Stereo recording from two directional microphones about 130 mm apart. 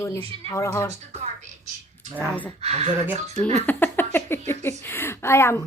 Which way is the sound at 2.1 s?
10° left (ahead or behind).